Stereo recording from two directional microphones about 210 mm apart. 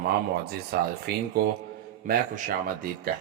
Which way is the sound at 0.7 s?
50° right (ahead or behind).